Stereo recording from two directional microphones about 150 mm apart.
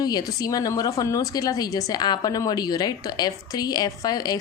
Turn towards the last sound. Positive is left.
turn(degrees=25)  # may be behind; listen again after turning